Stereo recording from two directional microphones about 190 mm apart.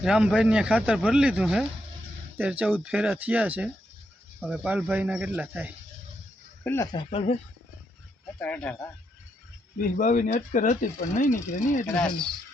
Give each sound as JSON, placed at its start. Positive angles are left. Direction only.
{"t": 0.0, "sound": "speech", "side_deg": -5}
{"t": 6.9, "sound": "speech", "side_deg": 30}
{"t": 8.4, "sound": "speech", "side_deg": 5}
{"t": 9.7, "sound": "speech", "side_deg": 45}
{"t": 11.9, "sound": "speech", "side_deg": 5}